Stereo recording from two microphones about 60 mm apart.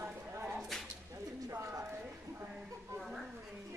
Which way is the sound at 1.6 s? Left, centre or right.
Right.